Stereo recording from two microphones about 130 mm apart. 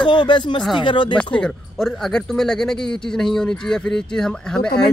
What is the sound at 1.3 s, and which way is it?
Speech, 5° left (ahead or behind).